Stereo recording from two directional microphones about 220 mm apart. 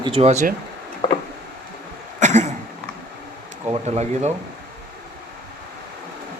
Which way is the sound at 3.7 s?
30° right (ahead or behind).